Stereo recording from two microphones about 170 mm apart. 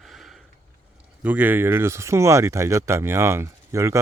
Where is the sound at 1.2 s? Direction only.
10° right (ahead or behind).